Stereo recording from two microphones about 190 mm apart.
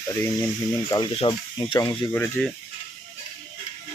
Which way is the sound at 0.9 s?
15° left (ahead or behind).